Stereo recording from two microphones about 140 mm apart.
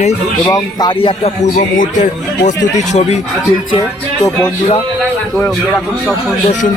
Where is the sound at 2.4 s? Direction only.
55° left (ahead or behind).